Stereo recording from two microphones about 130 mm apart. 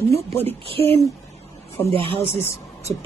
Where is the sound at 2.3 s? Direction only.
20° left (ahead or behind).